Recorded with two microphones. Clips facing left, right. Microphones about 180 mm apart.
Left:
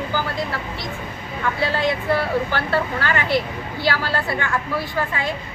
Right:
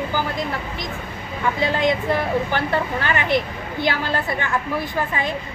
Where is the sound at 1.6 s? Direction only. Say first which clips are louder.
Right 2 dB; 20° right (ahead or behind).